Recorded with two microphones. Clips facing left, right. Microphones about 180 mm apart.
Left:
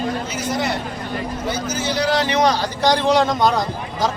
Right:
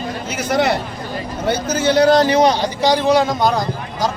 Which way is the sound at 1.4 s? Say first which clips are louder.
Right 9 dB; 60° right (ahead or behind).